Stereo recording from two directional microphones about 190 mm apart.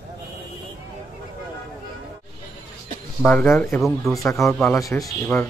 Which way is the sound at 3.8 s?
Centre (ahead or behind).